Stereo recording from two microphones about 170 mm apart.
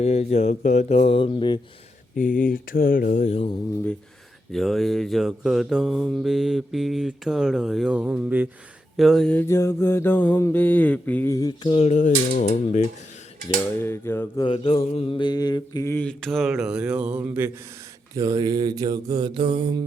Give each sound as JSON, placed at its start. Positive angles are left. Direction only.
{"t": 0.0, "sound": "speech", "side_deg": 40}
{"t": 2.1, "sound": "speech", "side_deg": 50}
{"t": 4.5, "sound": "mantra", "side_deg": 0}
{"t": 9.0, "sound": "mantra", "side_deg": 0}
{"t": 13.8, "sound": "mantra", "side_deg": 15}
{"t": 14.4, "sound": "mantra", "side_deg": 30}